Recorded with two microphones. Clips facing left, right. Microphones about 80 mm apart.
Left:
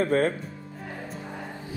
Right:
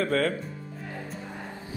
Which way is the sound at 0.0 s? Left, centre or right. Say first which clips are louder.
Left 2 dB; left.